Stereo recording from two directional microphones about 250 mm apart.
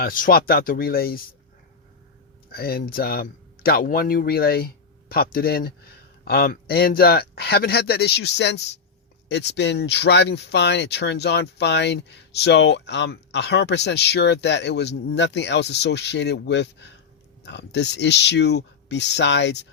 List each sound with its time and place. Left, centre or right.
0.0 s speech: left
2.5 s speech: left